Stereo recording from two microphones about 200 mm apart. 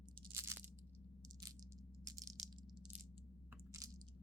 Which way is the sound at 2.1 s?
15° right (ahead or behind).